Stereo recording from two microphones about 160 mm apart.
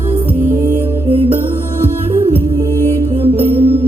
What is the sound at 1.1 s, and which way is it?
Music, 35° right (ahead or behind).